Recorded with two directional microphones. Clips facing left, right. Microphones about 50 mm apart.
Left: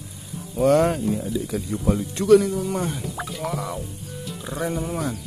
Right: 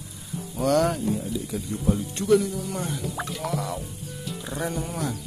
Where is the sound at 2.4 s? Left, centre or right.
Left.